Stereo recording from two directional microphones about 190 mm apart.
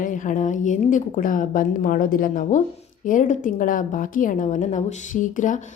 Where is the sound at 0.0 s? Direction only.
40° left (ahead or behind).